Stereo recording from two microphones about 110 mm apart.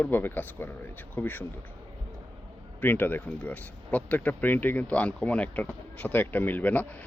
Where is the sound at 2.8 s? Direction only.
15° left (ahead or behind).